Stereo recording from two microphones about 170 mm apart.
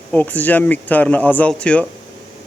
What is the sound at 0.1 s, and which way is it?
Speech, 10° left (ahead or behind).